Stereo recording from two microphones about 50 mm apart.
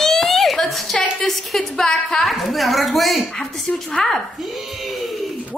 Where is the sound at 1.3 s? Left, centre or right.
Centre.